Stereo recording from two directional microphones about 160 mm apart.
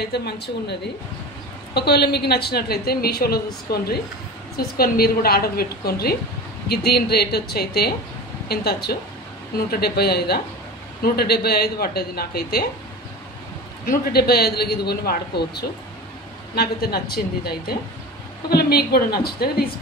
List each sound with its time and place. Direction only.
0.0 s a woman's voice: 90° left
13.8 s a woman's voice: 80° left